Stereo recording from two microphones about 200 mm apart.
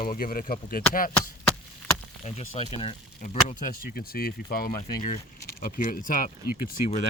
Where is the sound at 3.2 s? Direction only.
35° left (ahead or behind).